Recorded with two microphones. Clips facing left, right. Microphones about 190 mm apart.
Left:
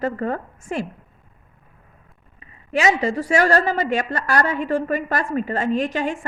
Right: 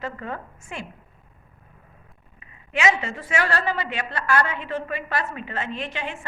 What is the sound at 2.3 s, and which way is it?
A woman's voice, 35° left (ahead or behind).